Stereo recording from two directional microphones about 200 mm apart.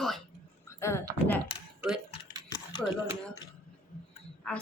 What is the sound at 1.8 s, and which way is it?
Speech, 5° right (ahead or behind).